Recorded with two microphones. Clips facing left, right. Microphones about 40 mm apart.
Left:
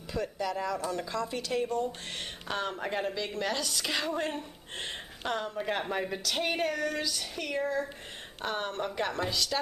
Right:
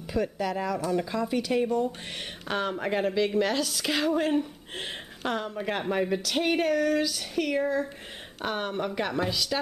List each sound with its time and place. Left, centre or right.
0.1 s a woman's voice: centre
0.7 s a woman's voice: centre
1.0 s a woman's voice: centre